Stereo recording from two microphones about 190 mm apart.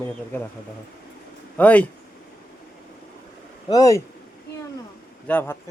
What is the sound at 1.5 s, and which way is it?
Speech, 5° left (ahead or behind).